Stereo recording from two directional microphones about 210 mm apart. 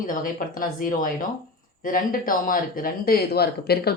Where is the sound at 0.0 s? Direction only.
40° left (ahead or behind).